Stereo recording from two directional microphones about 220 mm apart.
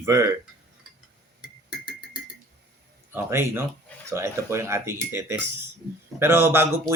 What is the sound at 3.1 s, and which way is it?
Speech, 10° right (ahead or behind).